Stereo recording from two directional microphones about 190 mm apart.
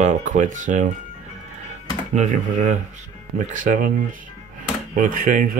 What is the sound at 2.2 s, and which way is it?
Speech, 40° right (ahead or behind).